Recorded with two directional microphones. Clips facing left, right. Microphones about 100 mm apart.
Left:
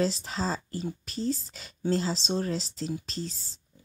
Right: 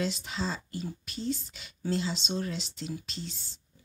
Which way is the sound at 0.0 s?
35° left (ahead or behind).